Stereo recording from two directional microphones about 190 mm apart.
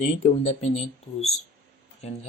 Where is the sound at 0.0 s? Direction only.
35° left (ahead or behind).